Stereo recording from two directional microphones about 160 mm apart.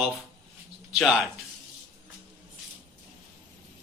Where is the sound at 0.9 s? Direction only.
Centre (ahead or behind).